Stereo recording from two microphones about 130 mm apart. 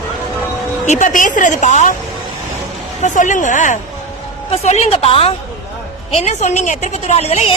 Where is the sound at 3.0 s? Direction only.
75° left (ahead or behind).